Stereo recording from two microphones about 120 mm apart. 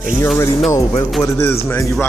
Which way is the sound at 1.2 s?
25° left (ahead or behind).